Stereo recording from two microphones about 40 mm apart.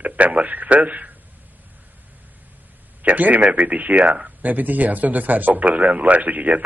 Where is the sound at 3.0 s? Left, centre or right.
Right.